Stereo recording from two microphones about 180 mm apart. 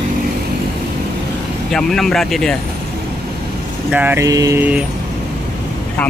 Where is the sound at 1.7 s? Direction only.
Centre (ahead or behind).